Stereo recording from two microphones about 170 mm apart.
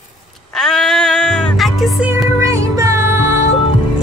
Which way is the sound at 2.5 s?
15° right (ahead or behind).